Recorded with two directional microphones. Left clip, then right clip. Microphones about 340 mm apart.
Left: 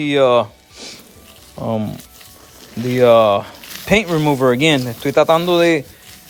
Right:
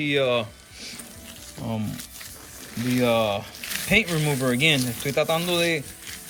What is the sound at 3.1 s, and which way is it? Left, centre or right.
Speech, left.